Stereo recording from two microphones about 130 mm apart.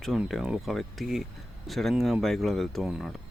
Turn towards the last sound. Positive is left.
turn(degrees=0)  # may be behind; listen again after turning